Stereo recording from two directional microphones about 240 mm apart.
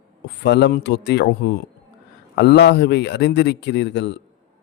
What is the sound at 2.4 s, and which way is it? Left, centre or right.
Speech, left.